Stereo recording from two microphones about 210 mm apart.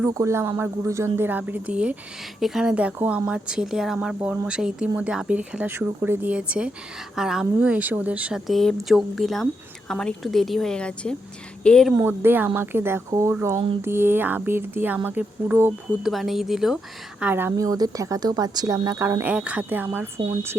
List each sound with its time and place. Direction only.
0.0 s speech: 15° right (ahead or behind); by 11.9 s 5° left (ahead or behind)
11.9 s speech: 10° right (ahead or behind)